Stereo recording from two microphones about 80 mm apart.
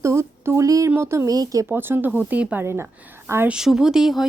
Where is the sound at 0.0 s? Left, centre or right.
Right.